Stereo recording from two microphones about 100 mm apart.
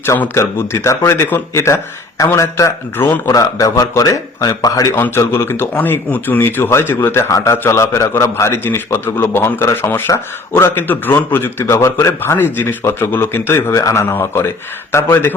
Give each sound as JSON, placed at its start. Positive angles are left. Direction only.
{"t": 0.0, "sound": "speech", "side_deg": 25}